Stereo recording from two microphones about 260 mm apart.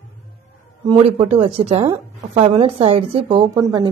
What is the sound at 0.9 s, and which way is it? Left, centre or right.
A woman's voice, right.